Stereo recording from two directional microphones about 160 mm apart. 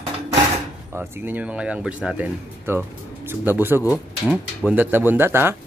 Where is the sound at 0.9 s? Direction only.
15° right (ahead or behind).